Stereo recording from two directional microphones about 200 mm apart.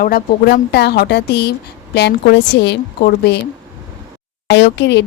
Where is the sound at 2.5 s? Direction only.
60° left (ahead or behind).